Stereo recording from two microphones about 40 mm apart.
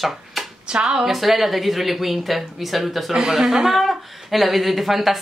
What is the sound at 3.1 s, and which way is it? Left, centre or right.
Speech, centre.